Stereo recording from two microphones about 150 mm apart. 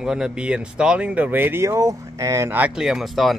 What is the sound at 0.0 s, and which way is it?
Speech, 5° right (ahead or behind).